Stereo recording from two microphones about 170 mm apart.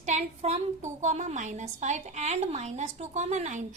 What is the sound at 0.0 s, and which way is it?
A woman's voice, 40° right (ahead or behind).